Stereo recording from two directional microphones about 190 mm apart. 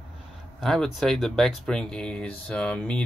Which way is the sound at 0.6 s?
Centre (ahead or behind).